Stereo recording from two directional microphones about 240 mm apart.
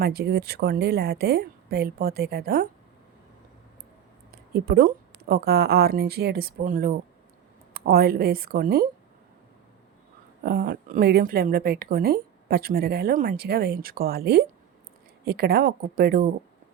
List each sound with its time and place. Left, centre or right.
0.0 s a woman's voice: right
4.3 s a woman's voice: right
10.4 s a woman's voice: right